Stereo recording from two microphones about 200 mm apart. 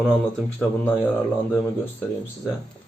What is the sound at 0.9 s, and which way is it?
Speech, 5° left (ahead or behind).